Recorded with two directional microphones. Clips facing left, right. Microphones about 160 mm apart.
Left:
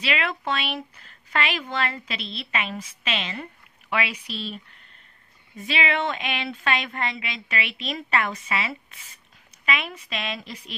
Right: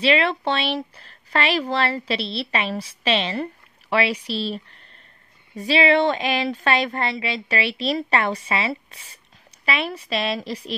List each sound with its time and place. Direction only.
0.0 s a woman's voice: 30° right (ahead or behind)
5.6 s a woman's voice: 35° right (ahead or behind)